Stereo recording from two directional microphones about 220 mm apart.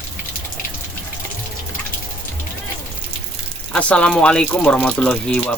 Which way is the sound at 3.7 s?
5° left (ahead or behind).